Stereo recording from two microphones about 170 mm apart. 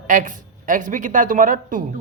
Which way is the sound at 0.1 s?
55° right (ahead or behind).